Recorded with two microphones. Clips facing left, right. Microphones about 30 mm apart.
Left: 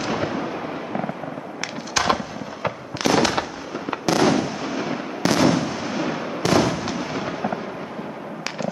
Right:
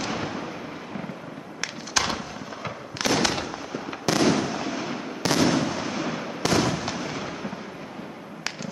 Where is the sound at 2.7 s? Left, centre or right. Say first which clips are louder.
Left 4 dB; centre.